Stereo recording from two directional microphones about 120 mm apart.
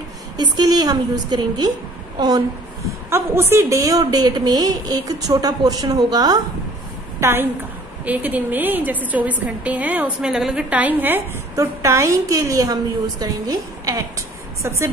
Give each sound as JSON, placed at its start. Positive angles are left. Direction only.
{"t": 0.4, "sound": "a woman's voice", "side_deg": -35}
{"t": 3.1, "sound": "a woman's voice", "side_deg": -20}
{"t": 7.2, "sound": "a woman's voice", "side_deg": -20}